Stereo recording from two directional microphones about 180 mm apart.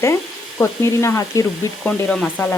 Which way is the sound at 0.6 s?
15° left (ahead or behind).